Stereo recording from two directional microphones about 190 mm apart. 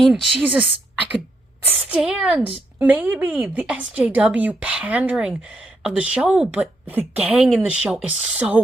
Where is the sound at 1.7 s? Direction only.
5° right (ahead or behind).